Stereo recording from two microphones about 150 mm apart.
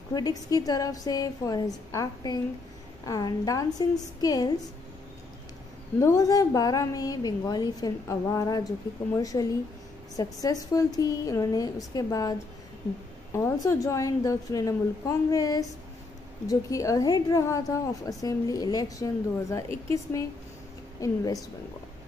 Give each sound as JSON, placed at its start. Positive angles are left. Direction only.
{"t": 0.1, "sound": "a woman's voice", "side_deg": 25}
{"t": 5.9, "sound": "a woman's voice", "side_deg": 25}